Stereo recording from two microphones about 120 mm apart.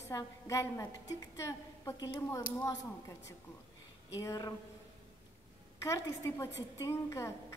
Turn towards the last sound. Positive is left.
turn(degrees=25)  # may be behind; listen again after turning